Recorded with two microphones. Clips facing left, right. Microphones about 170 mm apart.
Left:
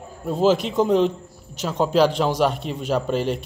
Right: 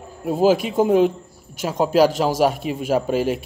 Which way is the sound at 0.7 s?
50° right (ahead or behind).